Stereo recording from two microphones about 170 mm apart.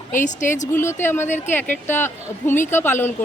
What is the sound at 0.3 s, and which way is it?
Speech, 45° left (ahead or behind).